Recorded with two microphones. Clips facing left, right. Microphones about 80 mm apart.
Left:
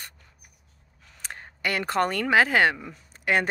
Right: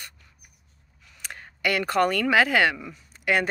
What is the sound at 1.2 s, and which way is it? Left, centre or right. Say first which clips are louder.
A woman's voice: right 3 dB; left.